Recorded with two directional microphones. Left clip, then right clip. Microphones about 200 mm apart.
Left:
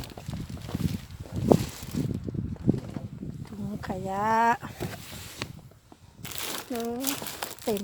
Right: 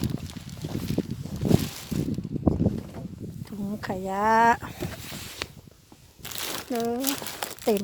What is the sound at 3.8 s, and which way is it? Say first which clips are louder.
Speech: right 2 dB; 40° right (ahead or behind).